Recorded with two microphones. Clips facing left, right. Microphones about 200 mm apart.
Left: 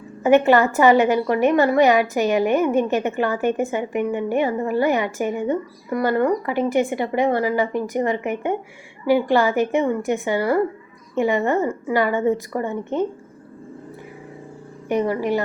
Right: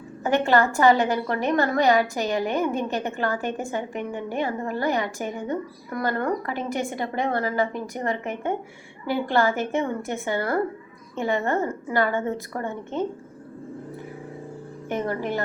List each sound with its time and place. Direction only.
0.2 s a woman's voice: 15° left (ahead or behind)
14.8 s a woman's voice: 10° left (ahead or behind)